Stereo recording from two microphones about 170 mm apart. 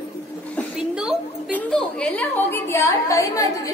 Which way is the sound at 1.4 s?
5° left (ahead or behind).